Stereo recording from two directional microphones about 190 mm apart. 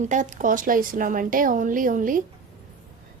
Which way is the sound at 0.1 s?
40° right (ahead or behind).